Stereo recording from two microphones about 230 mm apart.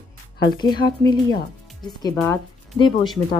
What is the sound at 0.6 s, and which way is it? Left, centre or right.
Speech, centre.